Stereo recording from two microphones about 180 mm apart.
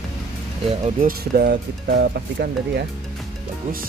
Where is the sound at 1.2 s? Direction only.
60° right (ahead or behind).